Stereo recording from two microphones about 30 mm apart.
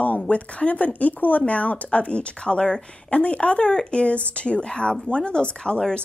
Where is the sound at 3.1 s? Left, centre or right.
Left.